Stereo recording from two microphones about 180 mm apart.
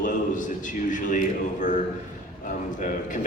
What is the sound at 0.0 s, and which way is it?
A man's voice, 45° left (ahead or behind).